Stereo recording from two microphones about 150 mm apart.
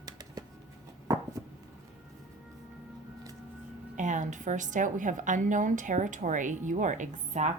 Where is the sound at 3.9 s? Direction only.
55° right (ahead or behind).